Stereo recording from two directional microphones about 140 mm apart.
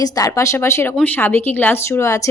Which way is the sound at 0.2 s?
20° left (ahead or behind).